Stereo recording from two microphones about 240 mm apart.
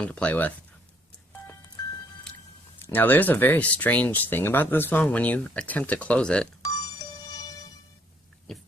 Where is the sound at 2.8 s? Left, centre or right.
Centre.